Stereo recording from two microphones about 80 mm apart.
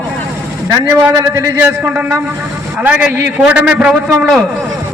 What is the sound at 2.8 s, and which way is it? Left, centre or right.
A man's voice, centre.